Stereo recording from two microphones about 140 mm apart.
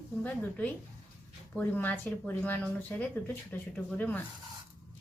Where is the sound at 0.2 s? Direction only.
10° left (ahead or behind).